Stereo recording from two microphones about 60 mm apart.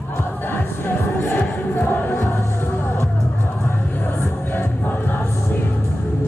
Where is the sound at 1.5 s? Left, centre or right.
Left.